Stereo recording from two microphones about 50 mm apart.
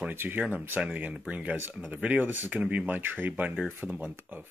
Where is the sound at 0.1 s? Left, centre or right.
Right.